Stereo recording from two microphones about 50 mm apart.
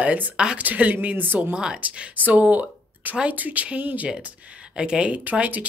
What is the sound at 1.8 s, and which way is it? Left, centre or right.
Speech, right.